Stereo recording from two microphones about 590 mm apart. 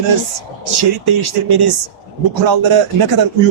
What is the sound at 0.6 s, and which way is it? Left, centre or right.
Speech, right.